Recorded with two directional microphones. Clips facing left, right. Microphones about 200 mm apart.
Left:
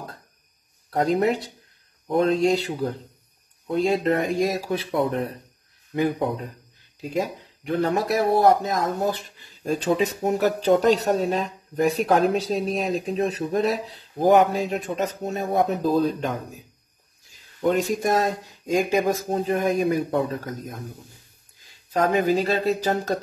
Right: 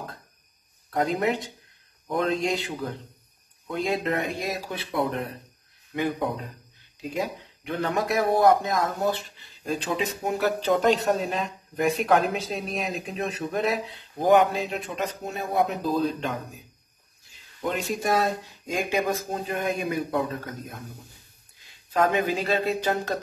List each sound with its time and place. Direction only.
0.8 s a sound: 35° left (ahead or behind)
2.0 s speech: 35° left (ahead or behind)
7.0 s speech: 40° left (ahead or behind)
17.6 s speech: 45° left (ahead or behind)
21.9 s speech: 40° left (ahead or behind)